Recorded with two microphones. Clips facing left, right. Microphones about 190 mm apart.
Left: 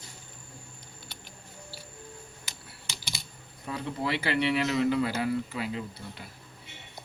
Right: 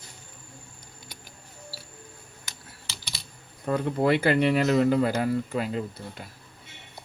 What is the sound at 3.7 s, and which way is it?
Speech, 50° right (ahead or behind).